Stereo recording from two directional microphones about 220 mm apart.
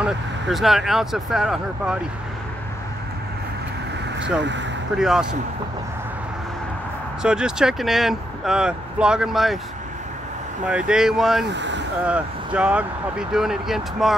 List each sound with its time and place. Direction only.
0.0 s speech: centre (ahead or behind)
4.4 s speech: 55° right (ahead or behind)
4.9 s speech: centre (ahead or behind)
7.2 s speech: 5° right (ahead or behind)
10.7 s speech: 5° right (ahead or behind)
11.4 s speech: 55° right (ahead or behind)
12.1 s speech: 5° right (ahead or behind)